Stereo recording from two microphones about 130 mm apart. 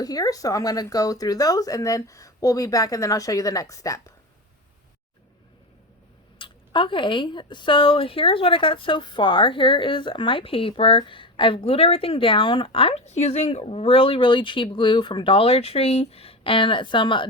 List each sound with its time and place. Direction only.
0.0 s speech: 30° left (ahead or behind)
6.4 s speech: 40° left (ahead or behind)